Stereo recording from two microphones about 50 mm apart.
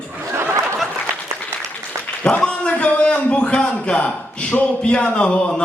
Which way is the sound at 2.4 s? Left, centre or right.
Left.